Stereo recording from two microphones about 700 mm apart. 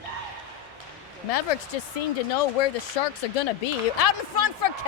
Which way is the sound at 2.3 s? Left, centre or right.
Left.